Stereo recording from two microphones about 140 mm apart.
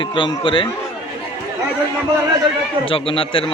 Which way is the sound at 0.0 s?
35° left (ahead or behind).